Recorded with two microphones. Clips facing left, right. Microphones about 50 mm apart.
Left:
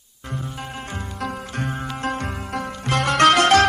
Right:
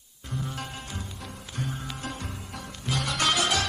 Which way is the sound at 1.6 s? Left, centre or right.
Left.